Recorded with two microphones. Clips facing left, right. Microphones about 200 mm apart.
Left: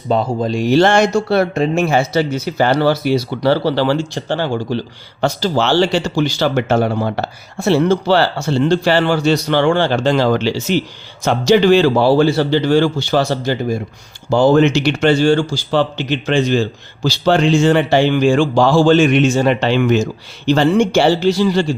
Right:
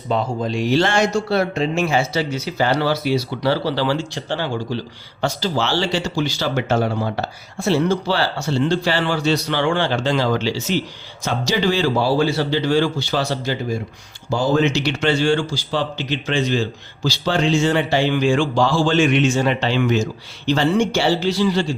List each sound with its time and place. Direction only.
0.1 s a man's voice: 40° left (ahead or behind)
14.3 s a man's voice: 65° left (ahead or behind); by 15.6 s 40° left (ahead or behind)
15.7 s a man's voice: 60° left (ahead or behind)
18.2 s speech: 40° left (ahead or behind)